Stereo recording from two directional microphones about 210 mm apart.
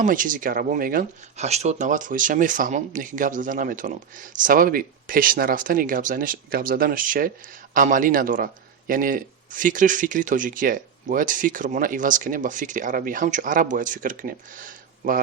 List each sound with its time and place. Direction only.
0.0 s speech: 40° right (ahead or behind)